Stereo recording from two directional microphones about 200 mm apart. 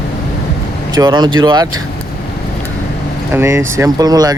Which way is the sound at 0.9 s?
20° right (ahead or behind).